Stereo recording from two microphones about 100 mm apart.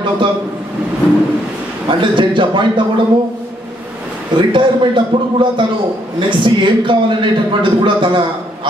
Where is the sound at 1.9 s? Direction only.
55° right (ahead or behind).